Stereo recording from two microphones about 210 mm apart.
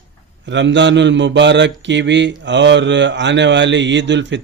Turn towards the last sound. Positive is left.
turn(degrees=-60)  # may be behind; listen again after turning